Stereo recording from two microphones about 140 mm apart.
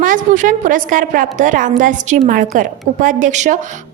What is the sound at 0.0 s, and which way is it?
A woman's voice, 70° right (ahead or behind).